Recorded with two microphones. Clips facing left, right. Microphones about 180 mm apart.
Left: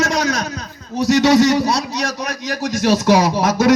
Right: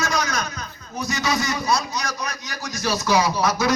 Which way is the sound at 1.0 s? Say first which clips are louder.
Left 13 dB; 80° left.